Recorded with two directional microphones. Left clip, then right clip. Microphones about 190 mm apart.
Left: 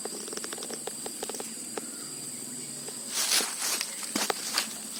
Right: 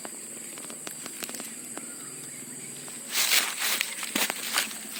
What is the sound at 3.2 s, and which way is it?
Walk, 35° right (ahead or behind).